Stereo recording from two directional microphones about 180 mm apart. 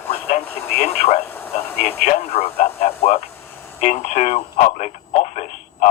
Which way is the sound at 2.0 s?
35° left (ahead or behind).